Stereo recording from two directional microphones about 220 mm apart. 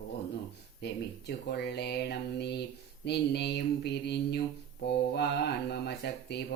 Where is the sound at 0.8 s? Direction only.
50° left (ahead or behind).